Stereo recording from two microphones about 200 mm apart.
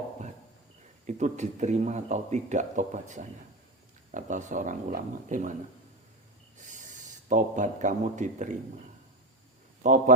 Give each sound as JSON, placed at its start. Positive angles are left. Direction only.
{"t": 1.0, "sound": "speech", "side_deg": -35}
{"t": 6.6, "sound": "speech", "side_deg": -40}
{"t": 9.8, "sound": "speech", "side_deg": -40}